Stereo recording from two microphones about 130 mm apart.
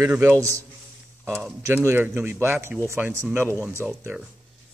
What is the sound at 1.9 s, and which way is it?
A man's voice, 15° right (ahead or behind).